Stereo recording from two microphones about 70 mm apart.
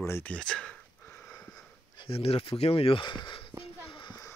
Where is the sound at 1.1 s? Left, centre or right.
Left.